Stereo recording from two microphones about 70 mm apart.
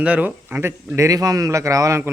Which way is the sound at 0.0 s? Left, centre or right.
Right.